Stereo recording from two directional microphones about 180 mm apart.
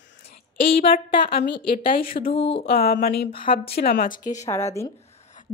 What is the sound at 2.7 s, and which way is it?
Speech, 60° left (ahead or behind).